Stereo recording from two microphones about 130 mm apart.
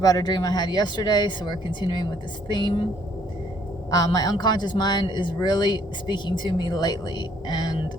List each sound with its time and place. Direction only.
0.0 s speech: 30° left (ahead or behind)
3.9 s speech: 30° left (ahead or behind)